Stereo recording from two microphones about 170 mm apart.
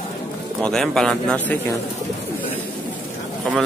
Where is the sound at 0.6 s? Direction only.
5° left (ahead or behind).